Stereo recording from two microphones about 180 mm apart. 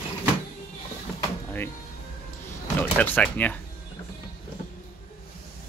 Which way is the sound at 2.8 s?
10° left (ahead or behind).